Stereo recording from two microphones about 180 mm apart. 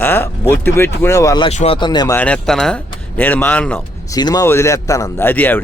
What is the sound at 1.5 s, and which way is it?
Speech, 35° left (ahead or behind).